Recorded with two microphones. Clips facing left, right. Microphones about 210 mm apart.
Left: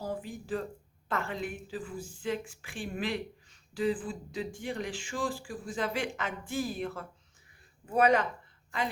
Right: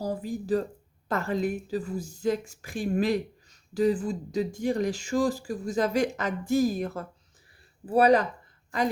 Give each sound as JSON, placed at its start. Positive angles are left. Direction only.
{"t": 0.0, "sound": "speech", "side_deg": -40}